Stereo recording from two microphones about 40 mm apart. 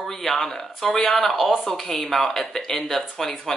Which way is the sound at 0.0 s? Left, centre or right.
Centre.